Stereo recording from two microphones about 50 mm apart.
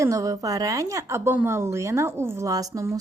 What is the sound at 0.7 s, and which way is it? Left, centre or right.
A woman's voice, right.